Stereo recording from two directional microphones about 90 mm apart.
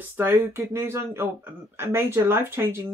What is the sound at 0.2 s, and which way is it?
Speech, 30° right (ahead or behind).